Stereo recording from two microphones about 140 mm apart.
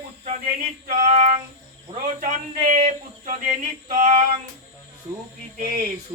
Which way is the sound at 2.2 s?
60° right (ahead or behind).